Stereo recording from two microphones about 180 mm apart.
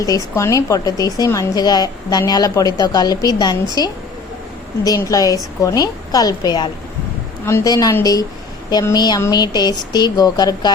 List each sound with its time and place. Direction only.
0.0 s a woman's voice: 15° left (ahead or behind)